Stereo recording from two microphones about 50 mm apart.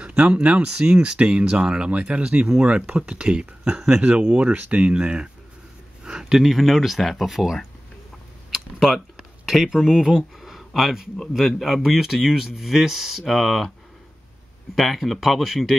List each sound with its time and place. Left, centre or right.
0.2 s speech: centre
8.5 s a sound: centre
9.5 s speech: centre
14.8 s speech: centre